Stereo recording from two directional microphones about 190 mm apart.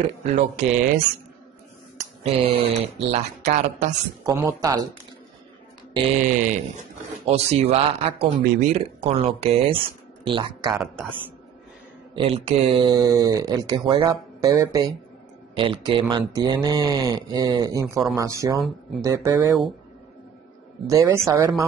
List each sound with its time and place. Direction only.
0.3 s speech: 35° right (ahead or behind)
2.2 s speech: 30° right (ahead or behind)
4.2 s speech: 15° right (ahead or behind)
6.2 s speech: 40° right (ahead or behind); by 10.8 s 25° right (ahead or behind)
10.8 s a man's voice: centre (ahead or behind)
12.2 s speech: 30° right (ahead or behind); by 19.4 s 15° right (ahead or behind)
20.8 s speech: 15° right (ahead or behind)